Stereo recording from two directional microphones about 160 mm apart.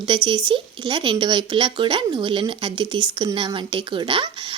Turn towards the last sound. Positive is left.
turn(degrees=-30)  # may be behind; listen again after turning